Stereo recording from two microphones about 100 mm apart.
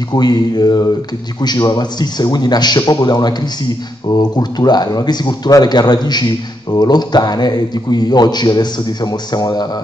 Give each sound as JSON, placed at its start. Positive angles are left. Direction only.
{"t": 0.1, "sound": "a man's voice", "side_deg": 45}